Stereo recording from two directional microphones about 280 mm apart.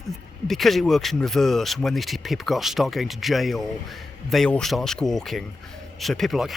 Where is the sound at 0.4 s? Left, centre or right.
Centre.